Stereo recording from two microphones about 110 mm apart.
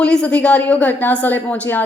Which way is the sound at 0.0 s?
10° left (ahead or behind).